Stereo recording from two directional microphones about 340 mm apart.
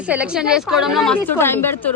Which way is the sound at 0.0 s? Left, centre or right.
Centre.